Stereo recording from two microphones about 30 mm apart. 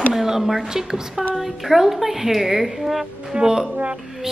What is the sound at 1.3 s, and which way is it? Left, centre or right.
A woman's voice, centre.